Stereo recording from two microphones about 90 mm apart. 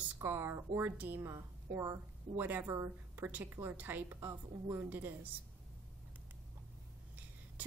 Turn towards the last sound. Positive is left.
turn(degrees=-15)  # may be behind; listen again after turning